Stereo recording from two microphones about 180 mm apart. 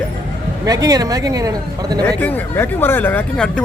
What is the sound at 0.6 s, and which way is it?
Speech, 20° right (ahead or behind).